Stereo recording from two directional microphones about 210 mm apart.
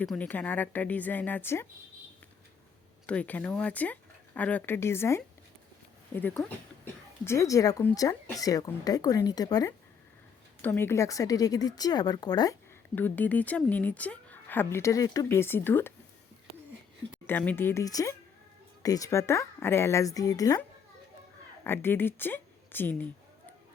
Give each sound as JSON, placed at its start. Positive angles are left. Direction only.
{"t": 0.0, "sound": "speech", "side_deg": 5}
{"t": 3.1, "sound": "speech", "side_deg": 5}
{"t": 13.0, "sound": "speech", "side_deg": 10}
{"t": 17.2, "sound": "a woman's voice", "side_deg": 10}